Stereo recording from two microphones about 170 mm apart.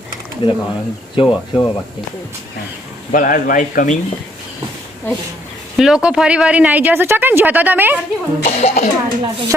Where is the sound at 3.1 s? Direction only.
55° left (ahead or behind).